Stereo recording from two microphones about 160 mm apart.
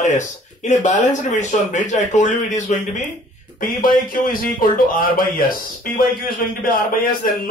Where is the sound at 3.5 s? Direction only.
60° left (ahead or behind).